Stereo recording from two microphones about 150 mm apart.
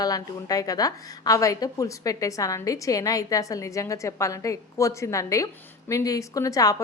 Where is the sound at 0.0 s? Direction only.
25° left (ahead or behind).